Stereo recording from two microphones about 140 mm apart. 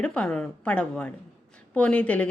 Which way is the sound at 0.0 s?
5° left (ahead or behind).